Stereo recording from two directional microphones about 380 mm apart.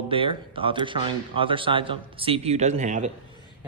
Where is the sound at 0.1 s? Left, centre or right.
Centre.